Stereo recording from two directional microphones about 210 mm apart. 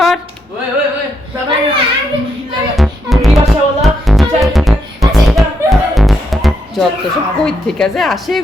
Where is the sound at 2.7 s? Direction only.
Centre (ahead or behind).